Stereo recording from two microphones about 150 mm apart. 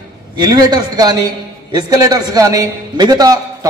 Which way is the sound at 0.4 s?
25° right (ahead or behind).